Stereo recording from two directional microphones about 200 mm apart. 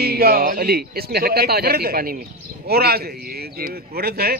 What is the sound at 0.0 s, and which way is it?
Speech, 50° right (ahead or behind).